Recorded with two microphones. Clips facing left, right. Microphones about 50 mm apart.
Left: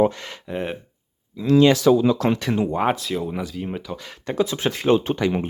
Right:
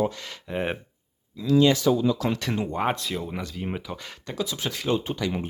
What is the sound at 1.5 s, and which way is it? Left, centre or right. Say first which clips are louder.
Speech: left 5 dB; left.